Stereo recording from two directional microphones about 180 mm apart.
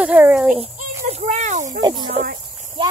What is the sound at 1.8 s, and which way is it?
Speech, 25° right (ahead or behind).